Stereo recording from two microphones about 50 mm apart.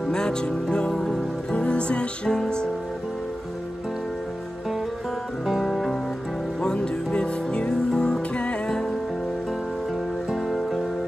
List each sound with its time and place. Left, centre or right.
0.0 s music: centre
5.5 s music: centre
6.6 s music: centre
10.3 s music: centre